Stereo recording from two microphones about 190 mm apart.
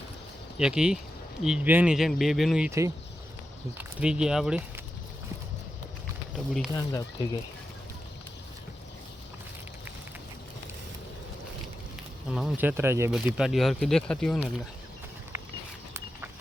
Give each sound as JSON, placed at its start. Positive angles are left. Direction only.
{"t": 0.6, "sound": "speech", "side_deg": -5}
{"t": 2.6, "sound": "speech", "side_deg": -15}
{"t": 3.8, "sound": "speech", "side_deg": -5}
{"t": 6.3, "sound": "speech", "side_deg": 0}
{"t": 6.7, "sound": "speech", "side_deg": 20}
{"t": 12.3, "sound": "speech", "side_deg": -5}